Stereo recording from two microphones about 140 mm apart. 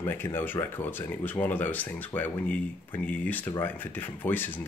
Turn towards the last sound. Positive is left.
turn(degrees=15)  # may be behind; listen again after turning